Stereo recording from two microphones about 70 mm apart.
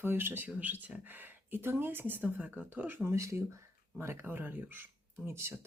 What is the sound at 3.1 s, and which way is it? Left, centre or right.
Speech, right.